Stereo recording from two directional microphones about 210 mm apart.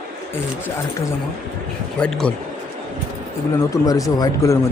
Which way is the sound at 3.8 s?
15° left (ahead or behind).